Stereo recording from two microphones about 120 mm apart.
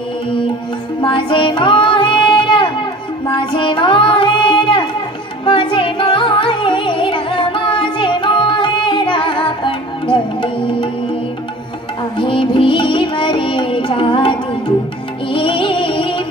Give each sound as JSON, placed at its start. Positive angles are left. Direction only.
{"t": 1.0, "sound": "music", "side_deg": 40}
{"t": 3.3, "sound": "child singing", "side_deg": 45}
{"t": 5.4, "sound": "music", "side_deg": 40}
{"t": 12.2, "sound": "music", "side_deg": 45}